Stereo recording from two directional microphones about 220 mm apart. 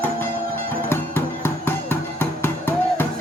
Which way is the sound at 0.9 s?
10° left (ahead or behind).